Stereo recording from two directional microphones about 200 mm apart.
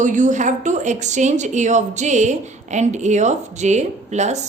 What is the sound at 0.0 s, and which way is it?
A woman's voice, 40° right (ahead or behind).